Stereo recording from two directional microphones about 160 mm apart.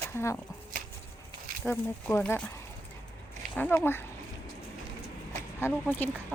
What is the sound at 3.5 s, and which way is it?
Speech, 10° left (ahead or behind).